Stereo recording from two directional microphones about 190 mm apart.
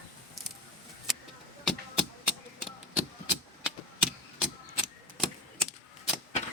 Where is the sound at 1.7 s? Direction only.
5° right (ahead or behind).